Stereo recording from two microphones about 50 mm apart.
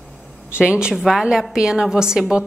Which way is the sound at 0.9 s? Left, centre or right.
Centre.